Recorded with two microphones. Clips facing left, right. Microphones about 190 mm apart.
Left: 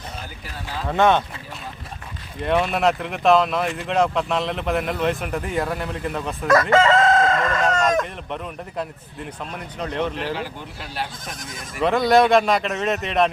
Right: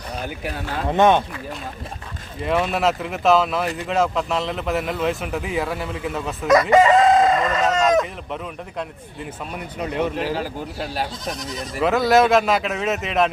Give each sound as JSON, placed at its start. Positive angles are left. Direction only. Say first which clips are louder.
{"t": 0.9, "sound": "speech", "louder": "right 2 dB", "side_deg": -20}
{"t": 2.4, "sound": "speech", "louder": "even", "side_deg": 0}
{"t": 6.5, "sound": "chicken", "louder": "right 2 dB", "side_deg": -15}
{"t": 7.6, "sound": "chicken", "louder": "right 2 dB", "side_deg": 0}
{"t": 9.5, "sound": "speech", "louder": "right 3 dB", "side_deg": -10}
{"t": 10.3, "sound": "speech", "louder": "right 4 dB", "side_deg": -40}
{"t": 11.3, "sound": "speech", "louder": "right 6 dB", "side_deg": 50}
{"t": 11.8, "sound": "speech", "louder": "even", "side_deg": -5}